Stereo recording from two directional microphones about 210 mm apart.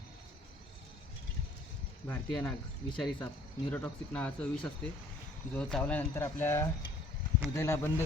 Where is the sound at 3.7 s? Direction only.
5° left (ahead or behind).